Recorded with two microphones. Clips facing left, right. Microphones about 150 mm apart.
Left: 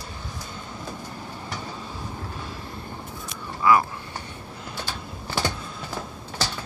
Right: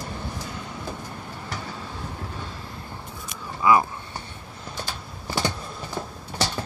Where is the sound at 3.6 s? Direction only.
20° right (ahead or behind).